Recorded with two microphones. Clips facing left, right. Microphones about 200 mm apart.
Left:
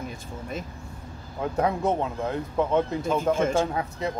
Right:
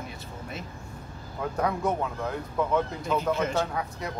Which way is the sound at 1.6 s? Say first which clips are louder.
Left 3 dB; 25° left (ahead or behind).